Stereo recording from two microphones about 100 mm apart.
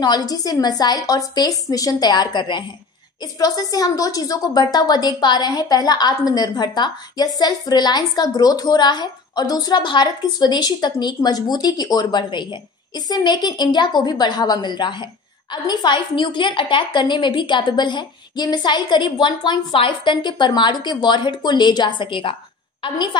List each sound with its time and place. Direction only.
0.0 s a woman's voice: 45° left (ahead or behind)